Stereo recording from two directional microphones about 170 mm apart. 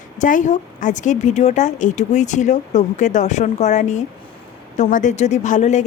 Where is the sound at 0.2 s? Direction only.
50° left (ahead or behind).